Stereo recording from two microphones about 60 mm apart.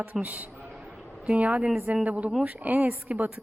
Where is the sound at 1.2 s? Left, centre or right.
Right.